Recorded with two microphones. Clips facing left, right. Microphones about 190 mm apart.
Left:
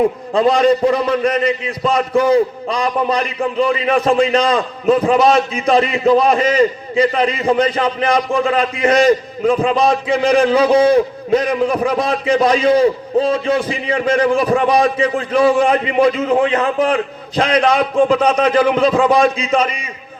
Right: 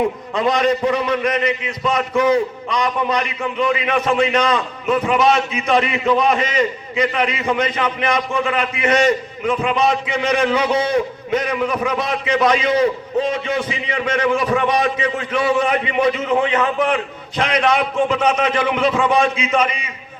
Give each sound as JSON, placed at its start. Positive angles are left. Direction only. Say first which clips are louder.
{"t": 0.3, "sound": "a man's voice", "louder": "left 5 dB", "side_deg": 35}